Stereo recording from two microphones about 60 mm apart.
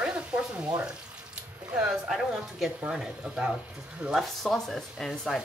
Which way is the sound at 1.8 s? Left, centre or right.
Centre.